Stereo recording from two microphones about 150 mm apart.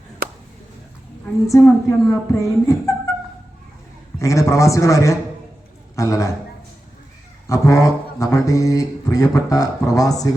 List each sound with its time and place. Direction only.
1.5 s speech: 20° left (ahead or behind)
4.2 s speech: 20° left (ahead or behind)
7.4 s speech: 20° left (ahead or behind)